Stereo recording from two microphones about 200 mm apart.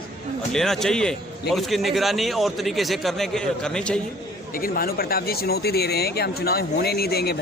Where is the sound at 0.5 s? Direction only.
Centre (ahead or behind).